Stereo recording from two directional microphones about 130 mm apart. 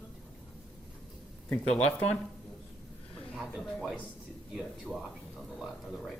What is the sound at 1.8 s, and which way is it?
Speech, 55° left (ahead or behind).